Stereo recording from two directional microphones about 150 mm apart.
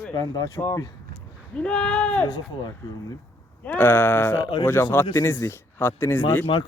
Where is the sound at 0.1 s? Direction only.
25° left (ahead or behind); by 2.2 s 5° left (ahead or behind).